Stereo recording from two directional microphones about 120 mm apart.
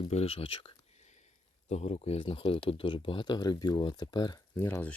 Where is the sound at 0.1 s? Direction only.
55° left (ahead or behind).